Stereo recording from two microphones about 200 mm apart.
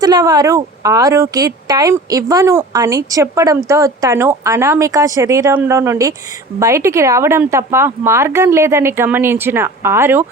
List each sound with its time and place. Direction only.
0.0 s speech: 20° right (ahead or behind)